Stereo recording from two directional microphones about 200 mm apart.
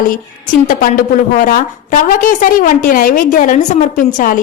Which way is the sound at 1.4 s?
45° left (ahead or behind).